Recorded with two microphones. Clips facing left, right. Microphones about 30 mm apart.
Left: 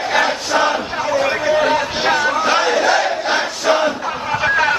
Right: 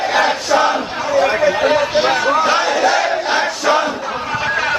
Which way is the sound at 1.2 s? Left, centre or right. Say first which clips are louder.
Right 4 dB; centre.